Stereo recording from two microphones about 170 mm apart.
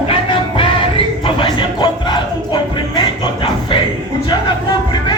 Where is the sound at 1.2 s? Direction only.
30° left (ahead or behind).